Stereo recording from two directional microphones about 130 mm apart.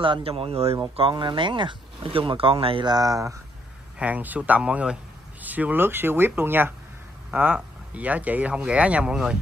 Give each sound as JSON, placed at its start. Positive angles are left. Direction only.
{"t": 0.0, "sound": "speech", "side_deg": -45}
{"t": 4.0, "sound": "speech", "side_deg": -10}